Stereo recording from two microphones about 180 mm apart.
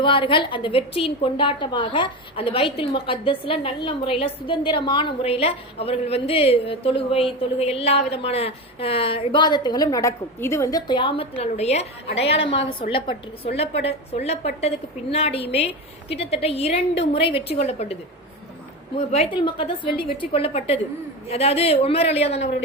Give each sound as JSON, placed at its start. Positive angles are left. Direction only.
{"t": 0.0, "sound": "a woman's voice", "side_deg": 30}
{"t": 18.9, "sound": "a woman's voice", "side_deg": 35}